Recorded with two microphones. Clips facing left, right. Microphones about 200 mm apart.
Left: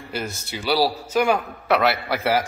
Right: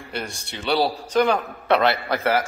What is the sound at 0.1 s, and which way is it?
A man's voice, 5° left (ahead or behind).